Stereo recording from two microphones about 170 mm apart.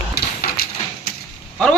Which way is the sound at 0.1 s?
65° left (ahead or behind).